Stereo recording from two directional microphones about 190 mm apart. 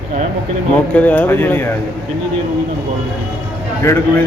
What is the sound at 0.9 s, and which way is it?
Speech, 10° left (ahead or behind).